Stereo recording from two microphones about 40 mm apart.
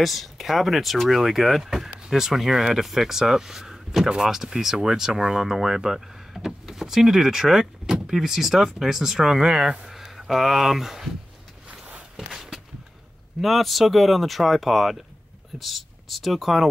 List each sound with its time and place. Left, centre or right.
0.0 s speech: centre
12.2 s walk: centre
13.4 s speech: centre